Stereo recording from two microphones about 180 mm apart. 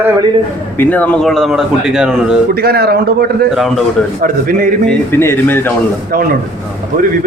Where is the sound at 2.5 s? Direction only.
60° right (ahead or behind).